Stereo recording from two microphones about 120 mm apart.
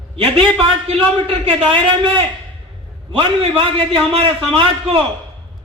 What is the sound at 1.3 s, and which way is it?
A man's voice, 50° right (ahead or behind).